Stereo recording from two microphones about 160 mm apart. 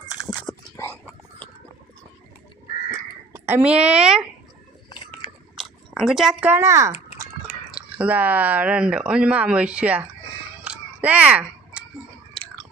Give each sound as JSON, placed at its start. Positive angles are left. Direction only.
{"t": 0.1, "sound": "dog", "side_deg": 25}
{"t": 2.9, "sound": "a sound", "side_deg": -15}
{"t": 5.9, "sound": "speech", "side_deg": 0}
{"t": 6.5, "sound": "speech", "side_deg": -15}
{"t": 10.6, "sound": "a sound", "side_deg": -10}
{"t": 12.3, "sound": "chewing", "side_deg": 5}